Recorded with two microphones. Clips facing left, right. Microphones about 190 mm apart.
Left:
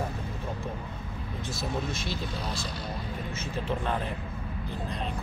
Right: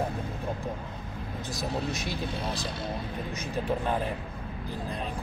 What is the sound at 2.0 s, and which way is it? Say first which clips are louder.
Speech: right 2 dB; 15° right (ahead or behind).